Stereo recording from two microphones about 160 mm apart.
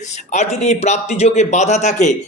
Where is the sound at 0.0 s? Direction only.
45° left (ahead or behind).